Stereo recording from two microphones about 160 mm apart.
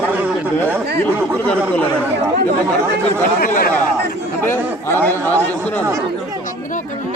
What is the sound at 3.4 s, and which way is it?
Speech, 60° left (ahead or behind).